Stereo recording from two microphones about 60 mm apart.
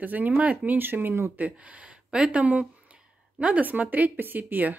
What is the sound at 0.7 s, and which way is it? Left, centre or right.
Speech, right.